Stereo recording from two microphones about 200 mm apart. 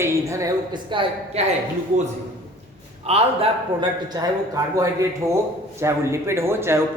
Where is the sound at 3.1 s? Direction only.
30° right (ahead or behind).